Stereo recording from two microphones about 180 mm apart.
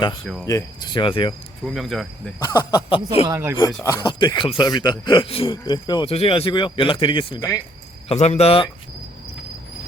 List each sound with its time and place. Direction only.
0.4 s speech: 20° left (ahead or behind)
1.6 s cricket: centre (ahead or behind)
2.4 s speech: 20° left (ahead or behind)
3.2 s speech: 15° right (ahead or behind)
3.8 s speech: 25° left (ahead or behind)
8.0 s speech: 40° left (ahead or behind)